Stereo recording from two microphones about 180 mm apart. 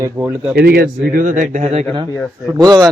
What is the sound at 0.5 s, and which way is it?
Speech, 60° right (ahead or behind).